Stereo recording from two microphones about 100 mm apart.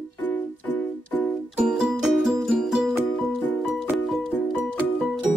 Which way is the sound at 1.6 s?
5° right (ahead or behind).